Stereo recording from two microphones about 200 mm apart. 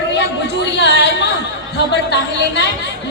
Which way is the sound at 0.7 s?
60° left (ahead or behind).